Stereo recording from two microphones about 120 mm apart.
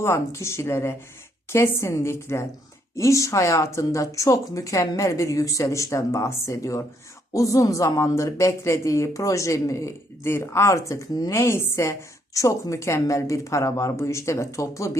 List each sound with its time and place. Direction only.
0.0 s speech: 25° left (ahead or behind)